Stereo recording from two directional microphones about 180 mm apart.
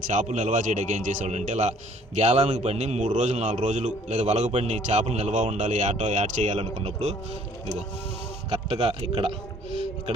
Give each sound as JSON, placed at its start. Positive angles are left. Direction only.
{"t": 0.1, "sound": "a man's voice", "side_deg": -45}
{"t": 8.4, "sound": "a man's voice", "side_deg": -35}